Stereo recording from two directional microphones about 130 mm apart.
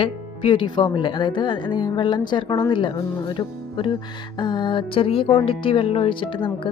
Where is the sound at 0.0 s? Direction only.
40° left (ahead or behind).